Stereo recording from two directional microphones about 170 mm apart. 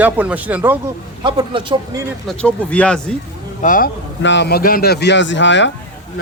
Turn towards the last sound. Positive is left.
turn(degrees=90)